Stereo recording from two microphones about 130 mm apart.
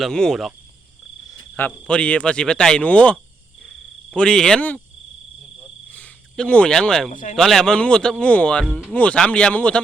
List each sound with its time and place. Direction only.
0.0 s speech: 5° left (ahead or behind)
1.3 s cricket: 15° left (ahead or behind)
1.9 s a man's voice: 10° left (ahead or behind)
3.6 s cricket: centre (ahead or behind)
5.9 s speech: 10° left (ahead or behind)
7.1 s speech: 90° left
7.3 s a man's voice: 5° left (ahead or behind)